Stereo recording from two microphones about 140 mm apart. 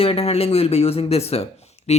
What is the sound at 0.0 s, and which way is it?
Speech, 45° left (ahead or behind).